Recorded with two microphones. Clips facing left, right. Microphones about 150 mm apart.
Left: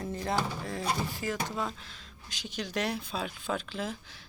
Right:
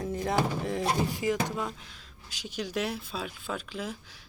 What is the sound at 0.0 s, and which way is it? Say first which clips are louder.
Speech: right 3 dB; 10° right (ahead or behind).